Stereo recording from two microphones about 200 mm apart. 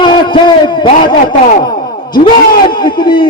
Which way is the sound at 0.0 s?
20° left (ahead or behind).